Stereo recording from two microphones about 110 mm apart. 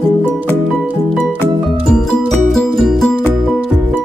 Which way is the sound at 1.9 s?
5° left (ahead or behind).